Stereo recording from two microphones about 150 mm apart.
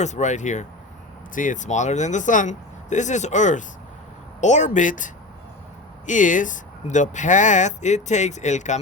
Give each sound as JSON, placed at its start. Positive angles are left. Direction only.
{"t": 0.0, "sound": "speech", "side_deg": 50}